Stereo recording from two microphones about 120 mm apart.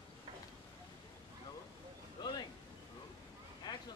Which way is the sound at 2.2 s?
35° left (ahead or behind).